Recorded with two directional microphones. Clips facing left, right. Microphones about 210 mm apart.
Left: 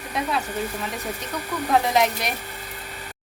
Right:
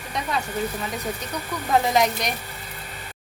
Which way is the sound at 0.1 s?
5° left (ahead or behind).